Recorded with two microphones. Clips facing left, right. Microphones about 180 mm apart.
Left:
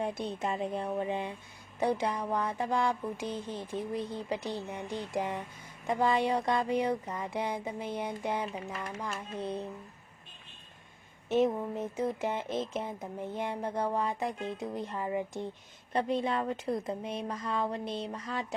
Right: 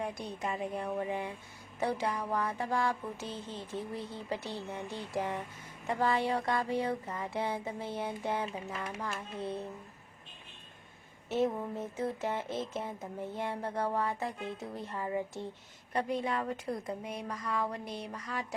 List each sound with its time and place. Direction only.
0.0 s speech: 25° left (ahead or behind)
11.3 s speech: 20° left (ahead or behind)